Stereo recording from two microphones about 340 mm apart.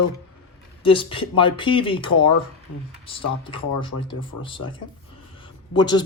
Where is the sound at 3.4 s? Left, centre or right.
Centre.